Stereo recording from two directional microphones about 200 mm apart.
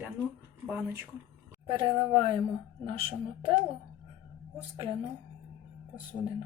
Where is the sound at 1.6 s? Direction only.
25° right (ahead or behind).